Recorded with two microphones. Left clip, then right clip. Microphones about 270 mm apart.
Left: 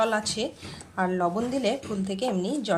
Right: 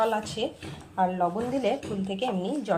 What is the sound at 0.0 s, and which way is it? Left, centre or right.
A woman's voice, centre.